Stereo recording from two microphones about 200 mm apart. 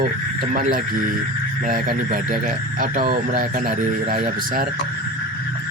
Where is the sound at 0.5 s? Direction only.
45° right (ahead or behind).